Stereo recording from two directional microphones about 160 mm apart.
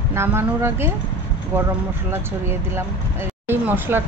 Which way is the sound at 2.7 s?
15° right (ahead or behind).